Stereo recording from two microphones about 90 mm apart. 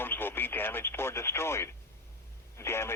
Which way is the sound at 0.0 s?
25° left (ahead or behind).